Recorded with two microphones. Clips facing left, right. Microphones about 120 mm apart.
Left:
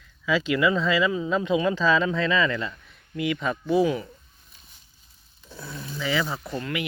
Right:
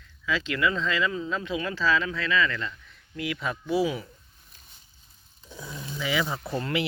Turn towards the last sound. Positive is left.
turn(degrees=-30)  # may be behind; listen again after turning